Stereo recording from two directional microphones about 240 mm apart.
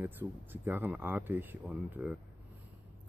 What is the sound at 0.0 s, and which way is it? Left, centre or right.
Speech, centre.